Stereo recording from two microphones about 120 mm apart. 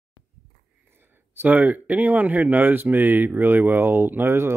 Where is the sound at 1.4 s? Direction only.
15° right (ahead or behind).